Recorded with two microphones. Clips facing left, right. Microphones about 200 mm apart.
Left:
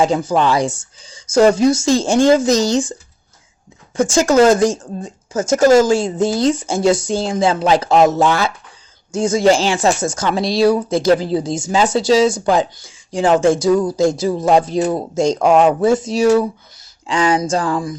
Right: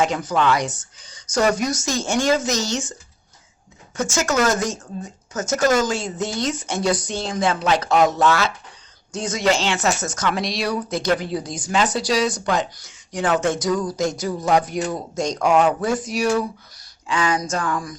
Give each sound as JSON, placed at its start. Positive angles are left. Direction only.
{"t": 0.0, "sound": "speech", "side_deg": 30}
{"t": 3.9, "sound": "speech", "side_deg": 30}